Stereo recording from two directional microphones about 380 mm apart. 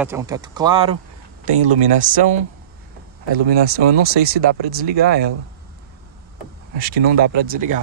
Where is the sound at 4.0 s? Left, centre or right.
Right.